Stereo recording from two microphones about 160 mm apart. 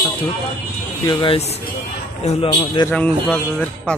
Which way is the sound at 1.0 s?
30° left (ahead or behind).